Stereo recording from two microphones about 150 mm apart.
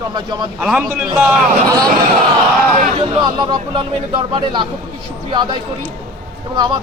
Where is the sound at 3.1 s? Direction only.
30° right (ahead or behind).